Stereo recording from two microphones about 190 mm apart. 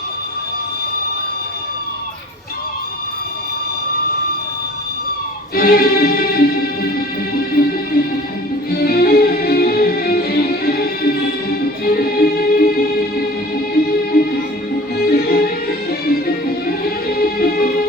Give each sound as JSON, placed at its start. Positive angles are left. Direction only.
{"t": 5.5, "sound": "music", "side_deg": 50}